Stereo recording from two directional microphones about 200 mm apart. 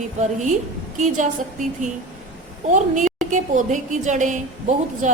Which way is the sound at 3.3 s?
40° right (ahead or behind).